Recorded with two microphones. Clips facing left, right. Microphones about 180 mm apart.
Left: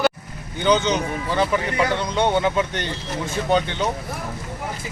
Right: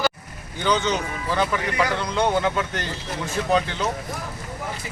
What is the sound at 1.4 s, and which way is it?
Speech, 30° left (ahead or behind).